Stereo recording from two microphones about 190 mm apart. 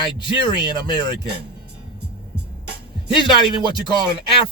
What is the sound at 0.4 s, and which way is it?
Speech, 25° left (ahead or behind).